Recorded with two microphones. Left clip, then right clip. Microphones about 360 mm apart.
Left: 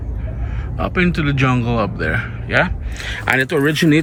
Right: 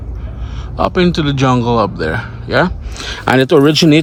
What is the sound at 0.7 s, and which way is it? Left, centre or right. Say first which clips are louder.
A man's voice: right 6 dB; centre.